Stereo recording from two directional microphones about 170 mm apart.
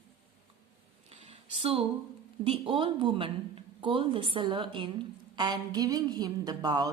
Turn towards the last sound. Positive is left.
turn(degrees=-25)  # may be behind; listen again after turning